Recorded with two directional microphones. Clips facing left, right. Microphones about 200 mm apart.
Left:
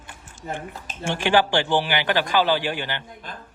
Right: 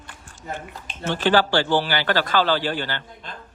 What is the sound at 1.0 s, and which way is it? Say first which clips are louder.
A man's voice: right 1 dB; 15° left (ahead or behind).